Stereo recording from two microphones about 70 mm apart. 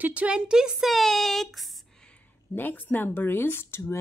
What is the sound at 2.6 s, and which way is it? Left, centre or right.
Speech, left.